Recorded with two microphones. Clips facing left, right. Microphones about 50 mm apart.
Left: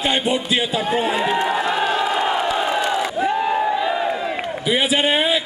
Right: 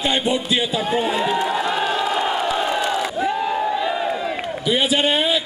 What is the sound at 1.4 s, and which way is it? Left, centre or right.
Crowd, centre.